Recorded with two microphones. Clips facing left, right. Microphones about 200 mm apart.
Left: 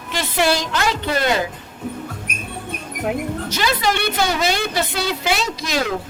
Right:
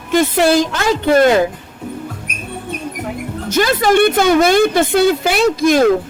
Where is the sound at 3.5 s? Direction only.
50° right (ahead or behind).